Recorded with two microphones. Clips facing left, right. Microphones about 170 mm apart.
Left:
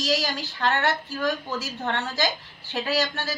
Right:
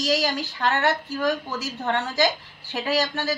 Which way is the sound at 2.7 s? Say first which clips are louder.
Right 1 dB; 15° right (ahead or behind).